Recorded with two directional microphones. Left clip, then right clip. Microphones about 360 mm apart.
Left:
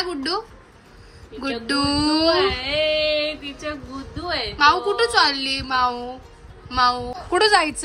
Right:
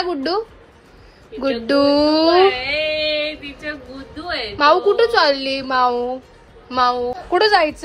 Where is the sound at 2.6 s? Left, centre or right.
Left.